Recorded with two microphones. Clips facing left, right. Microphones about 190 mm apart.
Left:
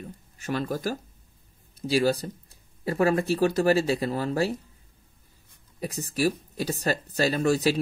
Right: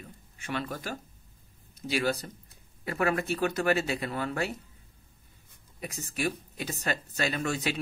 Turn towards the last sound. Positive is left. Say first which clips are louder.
# left 7 dB
turn(degrees=35)  # may be behind; listen again after turning